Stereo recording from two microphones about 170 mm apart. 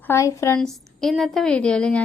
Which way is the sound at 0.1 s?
15° left (ahead or behind).